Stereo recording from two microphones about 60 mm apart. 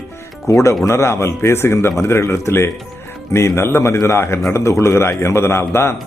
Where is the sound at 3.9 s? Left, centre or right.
Left.